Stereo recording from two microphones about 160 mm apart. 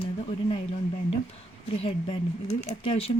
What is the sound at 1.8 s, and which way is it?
Speech, 35° left (ahead or behind).